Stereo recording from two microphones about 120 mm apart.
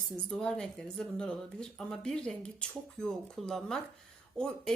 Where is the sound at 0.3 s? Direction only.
5° left (ahead or behind).